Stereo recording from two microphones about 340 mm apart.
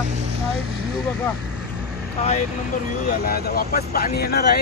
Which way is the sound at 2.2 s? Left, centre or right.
Centre.